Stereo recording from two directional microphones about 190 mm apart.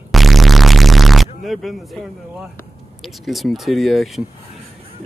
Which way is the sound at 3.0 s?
Centre (ahead or behind).